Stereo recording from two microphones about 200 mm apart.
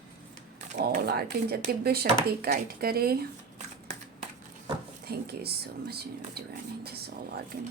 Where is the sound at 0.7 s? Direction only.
45° right (ahead or behind).